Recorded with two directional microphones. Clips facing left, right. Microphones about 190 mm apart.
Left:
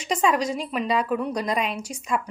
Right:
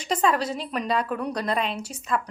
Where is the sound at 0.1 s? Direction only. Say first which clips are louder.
Left 1 dB; 10° left (ahead or behind).